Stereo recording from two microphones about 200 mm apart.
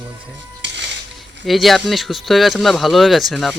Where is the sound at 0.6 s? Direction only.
60° right (ahead or behind).